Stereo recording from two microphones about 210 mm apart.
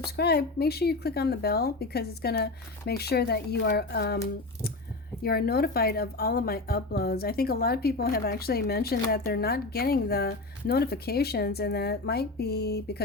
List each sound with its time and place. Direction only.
0.2 s speech: 50° left (ahead or behind)
5.2 s speech: 45° left (ahead or behind)